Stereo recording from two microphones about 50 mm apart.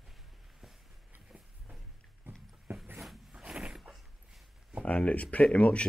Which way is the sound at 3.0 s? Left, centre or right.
Centre.